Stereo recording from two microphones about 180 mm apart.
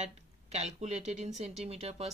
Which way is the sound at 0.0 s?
40° right (ahead or behind).